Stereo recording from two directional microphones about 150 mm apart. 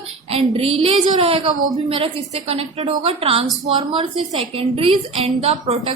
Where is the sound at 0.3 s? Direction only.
40° right (ahead or behind).